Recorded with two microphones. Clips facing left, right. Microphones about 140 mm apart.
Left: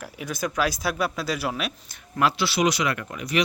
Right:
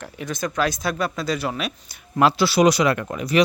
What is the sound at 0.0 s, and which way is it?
Speech, 5° left (ahead or behind).